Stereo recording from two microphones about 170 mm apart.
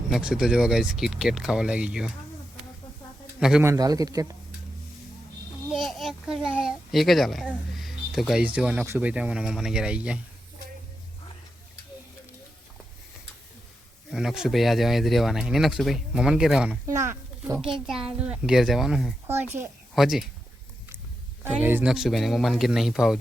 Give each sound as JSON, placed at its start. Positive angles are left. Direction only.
{"t": 0.1, "sound": "speech", "side_deg": -5}
{"t": 3.6, "sound": "a man's voice", "side_deg": -20}
{"t": 5.7, "sound": "a child's voice", "side_deg": 0}
{"t": 14.1, "sound": "speech", "side_deg": 0}
{"t": 16.8, "sound": "speech", "side_deg": -15}
{"t": 17.6, "sound": "speech", "side_deg": -5}
{"t": 19.3, "sound": "speech", "side_deg": -15}
{"t": 20.0, "sound": "speech", "side_deg": 0}
{"t": 21.4, "sound": "speech", "side_deg": -10}